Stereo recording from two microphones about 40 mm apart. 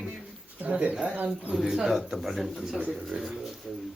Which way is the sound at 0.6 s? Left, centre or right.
Right.